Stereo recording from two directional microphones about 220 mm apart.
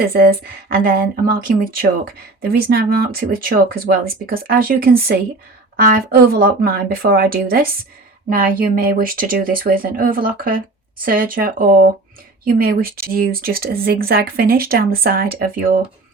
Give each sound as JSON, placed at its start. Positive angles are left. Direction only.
{"t": 0.0, "sound": "speech", "side_deg": -45}